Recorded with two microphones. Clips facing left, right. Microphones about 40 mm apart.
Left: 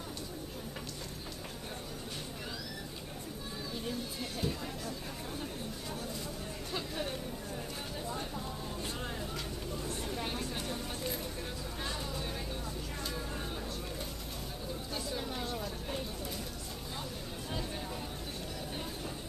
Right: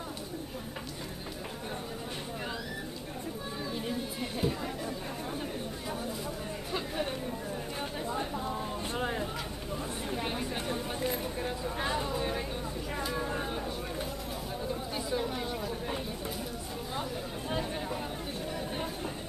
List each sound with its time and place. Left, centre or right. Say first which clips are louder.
3.7 s chatter: right 2 dB; centre
6.7 s chatter: right 4 dB; centre
8.1 s a sound: right 7 dB; right
14.7 s chatter: right 5 dB; centre